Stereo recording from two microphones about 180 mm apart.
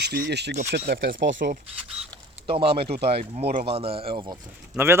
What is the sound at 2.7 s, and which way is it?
Speech, 30° right (ahead or behind).